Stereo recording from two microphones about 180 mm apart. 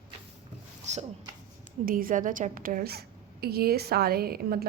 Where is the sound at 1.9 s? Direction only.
50° right (ahead or behind).